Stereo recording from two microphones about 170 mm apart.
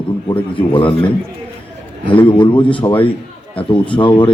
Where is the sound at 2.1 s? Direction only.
30° left (ahead or behind).